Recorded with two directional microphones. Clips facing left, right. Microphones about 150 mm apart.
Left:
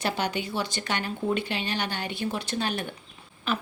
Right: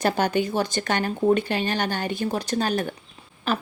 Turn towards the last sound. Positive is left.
turn(degrees=-40)  # may be behind; listen again after turning